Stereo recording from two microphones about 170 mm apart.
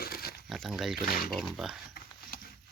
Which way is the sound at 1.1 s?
60° left (ahead or behind).